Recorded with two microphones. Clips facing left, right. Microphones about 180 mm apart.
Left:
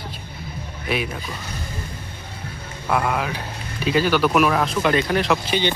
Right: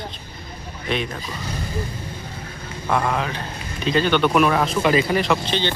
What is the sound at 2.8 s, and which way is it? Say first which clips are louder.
Speech: even; 5° left (ahead or behind).